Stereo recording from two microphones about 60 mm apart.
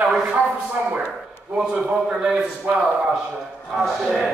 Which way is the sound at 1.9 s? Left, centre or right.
Centre.